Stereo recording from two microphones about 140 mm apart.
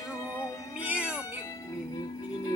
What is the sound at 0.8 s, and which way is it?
Music, 5° right (ahead or behind).